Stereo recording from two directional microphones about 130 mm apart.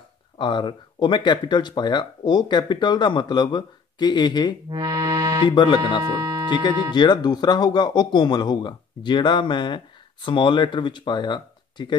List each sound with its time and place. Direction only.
0.4 s speech: 35° left (ahead or behind)
4.6 s accordion: 35° right (ahead or behind)
5.5 s speech: 35° left (ahead or behind)
6.0 s speech: 30° right (ahead or behind)
6.6 s speech: 35° left (ahead or behind)